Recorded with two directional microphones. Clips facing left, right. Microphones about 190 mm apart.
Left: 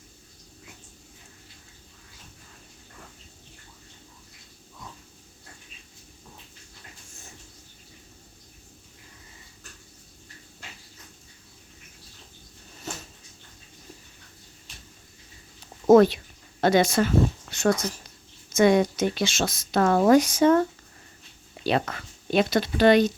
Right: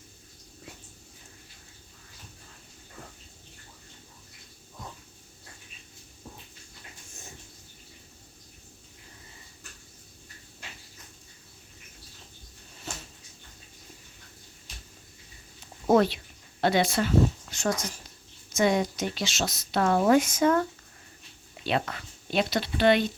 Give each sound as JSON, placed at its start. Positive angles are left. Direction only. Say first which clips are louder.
{"t": 15.9, "sound": "speech", "louder": "left 6 dB", "side_deg": 45}
{"t": 21.6, "sound": "speech", "louder": "left 4 dB", "side_deg": 40}